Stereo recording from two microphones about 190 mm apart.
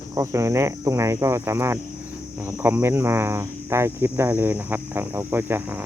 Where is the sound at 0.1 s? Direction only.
15° right (ahead or behind).